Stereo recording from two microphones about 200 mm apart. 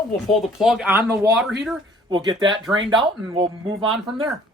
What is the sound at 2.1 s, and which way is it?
Speech, 25° right (ahead or behind).